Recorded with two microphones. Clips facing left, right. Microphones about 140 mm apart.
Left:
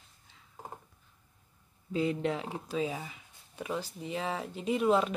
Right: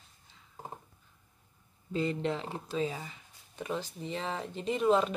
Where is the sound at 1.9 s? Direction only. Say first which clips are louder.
Left 1 dB; 10° left (ahead or behind).